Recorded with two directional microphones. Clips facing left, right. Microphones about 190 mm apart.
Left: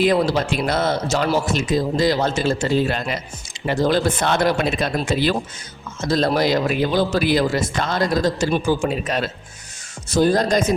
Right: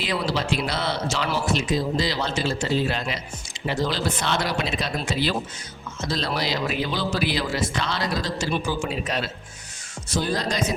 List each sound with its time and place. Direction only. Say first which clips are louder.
0.0 s a man's voice: left 8 dB; 50° left (ahead or behind)